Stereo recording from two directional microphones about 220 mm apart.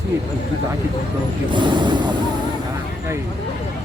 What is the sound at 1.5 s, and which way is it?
Speech, 20° right (ahead or behind).